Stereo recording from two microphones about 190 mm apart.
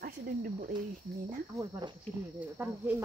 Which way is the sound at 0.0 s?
50° right (ahead or behind).